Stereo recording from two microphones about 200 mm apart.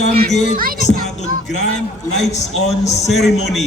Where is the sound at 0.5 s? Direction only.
45° right (ahead or behind).